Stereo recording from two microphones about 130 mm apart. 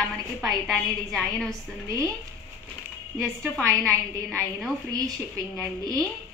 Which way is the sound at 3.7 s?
20° right (ahead or behind).